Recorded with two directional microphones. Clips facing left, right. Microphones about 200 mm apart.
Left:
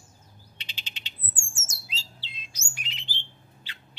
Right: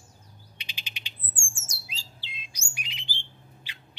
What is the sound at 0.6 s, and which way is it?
Bird, 10° right (ahead or behind).